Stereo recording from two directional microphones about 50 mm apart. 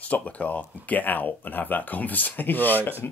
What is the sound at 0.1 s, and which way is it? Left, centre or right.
Speech, left.